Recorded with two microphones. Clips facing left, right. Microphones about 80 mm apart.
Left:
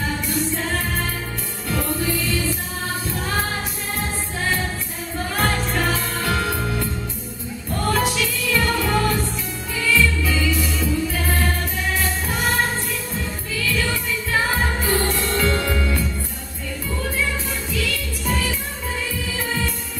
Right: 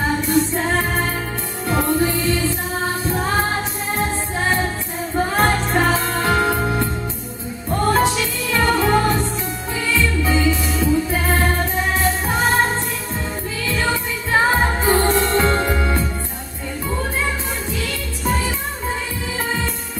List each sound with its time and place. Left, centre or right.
0.0 s music: right
13.6 s music: right